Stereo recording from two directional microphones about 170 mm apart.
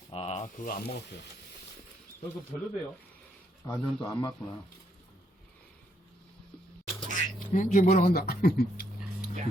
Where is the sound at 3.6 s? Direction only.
20° left (ahead or behind).